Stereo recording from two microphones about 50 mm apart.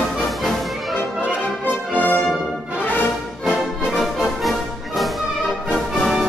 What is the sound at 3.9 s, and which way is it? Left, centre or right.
Music, centre.